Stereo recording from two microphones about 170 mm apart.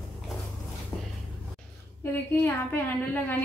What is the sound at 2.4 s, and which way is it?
Speech, 10° left (ahead or behind).